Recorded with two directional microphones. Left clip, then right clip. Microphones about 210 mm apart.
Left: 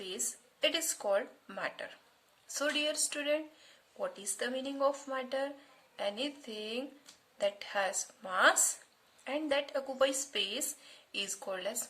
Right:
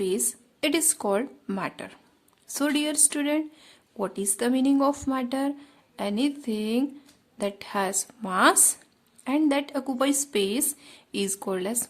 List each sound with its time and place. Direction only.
0.6 s speech: 45° right (ahead or behind)